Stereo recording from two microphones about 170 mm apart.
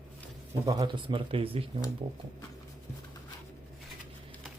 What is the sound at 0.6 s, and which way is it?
Speech, 25° right (ahead or behind).